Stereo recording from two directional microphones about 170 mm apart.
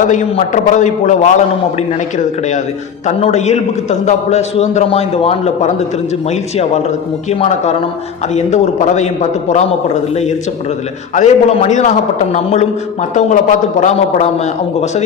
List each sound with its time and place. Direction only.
0.0 s a man's voice: 45° left (ahead or behind)